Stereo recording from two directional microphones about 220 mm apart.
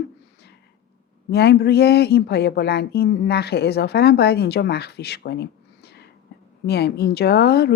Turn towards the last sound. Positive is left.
turn(degrees=50)  # may be behind; listen again after turning